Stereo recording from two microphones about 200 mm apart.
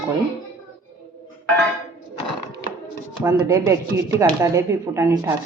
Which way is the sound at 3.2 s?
15° right (ahead or behind).